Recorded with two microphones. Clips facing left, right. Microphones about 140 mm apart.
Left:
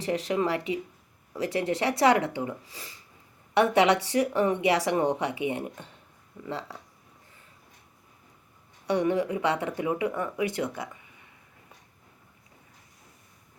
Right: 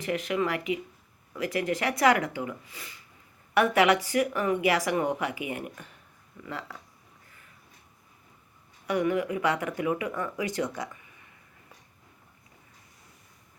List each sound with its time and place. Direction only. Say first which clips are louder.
0.0 s a woman's voice: left 1 dB; 30° left (ahead or behind)
8.9 s speech: left 1 dB; 30° left (ahead or behind)